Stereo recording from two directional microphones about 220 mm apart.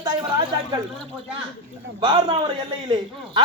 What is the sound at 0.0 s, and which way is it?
Speech, 20° right (ahead or behind).